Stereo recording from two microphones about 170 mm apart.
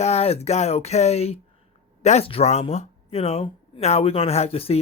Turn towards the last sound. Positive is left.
turn(degrees=35)  # may be behind; listen again after turning